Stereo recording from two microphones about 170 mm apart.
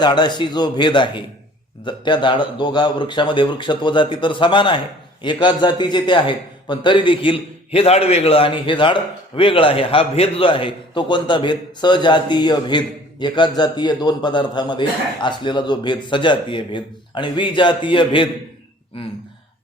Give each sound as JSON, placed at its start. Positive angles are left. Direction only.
{"t": 0.0, "sound": "a man's voice", "side_deg": 25}